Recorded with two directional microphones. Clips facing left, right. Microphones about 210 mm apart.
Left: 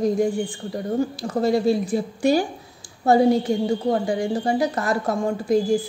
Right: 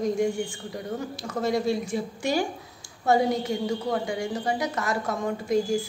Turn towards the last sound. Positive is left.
turn(degrees=35)  # may be behind; listen again after turning